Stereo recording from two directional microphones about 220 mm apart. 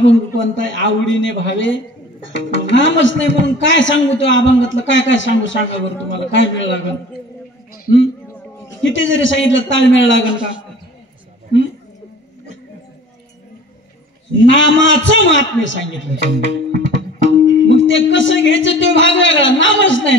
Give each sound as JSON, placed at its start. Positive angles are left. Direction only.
{"t": 0.0, "sound": "a man's voice", "side_deg": 60}
{"t": 8.8, "sound": "a man's voice", "side_deg": 60}
{"t": 14.4, "sound": "a man's voice", "side_deg": 55}